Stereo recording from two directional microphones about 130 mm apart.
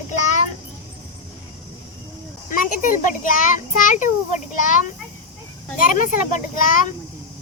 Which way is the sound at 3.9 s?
80° left.